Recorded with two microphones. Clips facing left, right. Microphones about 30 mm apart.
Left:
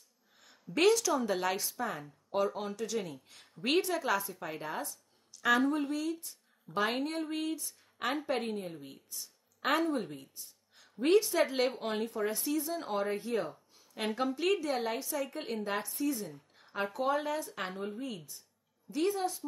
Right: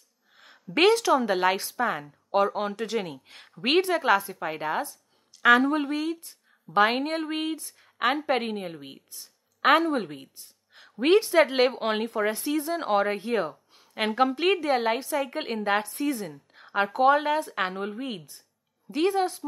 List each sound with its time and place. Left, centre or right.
0.4 s a woman's voice: right